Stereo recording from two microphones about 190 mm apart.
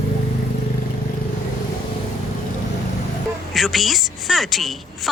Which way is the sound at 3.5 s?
Centre (ahead or behind).